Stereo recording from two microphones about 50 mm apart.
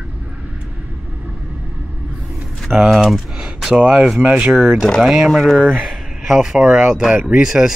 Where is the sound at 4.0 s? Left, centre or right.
Centre.